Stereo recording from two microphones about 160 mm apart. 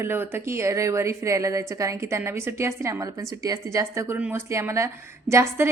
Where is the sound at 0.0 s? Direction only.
15° right (ahead or behind).